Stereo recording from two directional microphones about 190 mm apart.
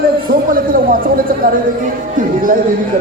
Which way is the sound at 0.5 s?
50° right (ahead or behind).